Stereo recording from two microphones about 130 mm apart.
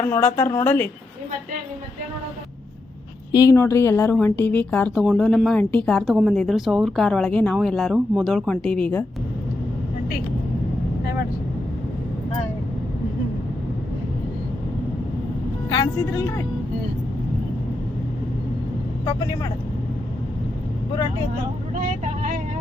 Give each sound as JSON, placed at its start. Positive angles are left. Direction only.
{"t": 0.0, "sound": "a woman's voice", "side_deg": 15}
{"t": 3.3, "sound": "a woman's voice", "side_deg": 25}
{"t": 15.7, "sound": "a woman's voice", "side_deg": 25}
{"t": 19.0, "sound": "speech", "side_deg": 25}